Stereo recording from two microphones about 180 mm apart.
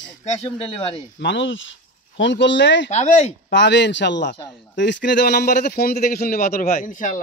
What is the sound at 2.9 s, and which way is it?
Speech, 40° left (ahead or behind).